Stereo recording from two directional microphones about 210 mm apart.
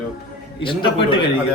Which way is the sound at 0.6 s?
25° left (ahead or behind).